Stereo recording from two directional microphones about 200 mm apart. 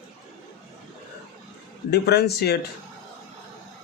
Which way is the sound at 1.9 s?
55° left (ahead or behind).